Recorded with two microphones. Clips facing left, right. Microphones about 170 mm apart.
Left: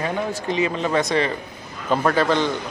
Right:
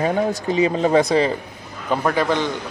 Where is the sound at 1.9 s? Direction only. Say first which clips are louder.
Even; 15° right (ahead or behind).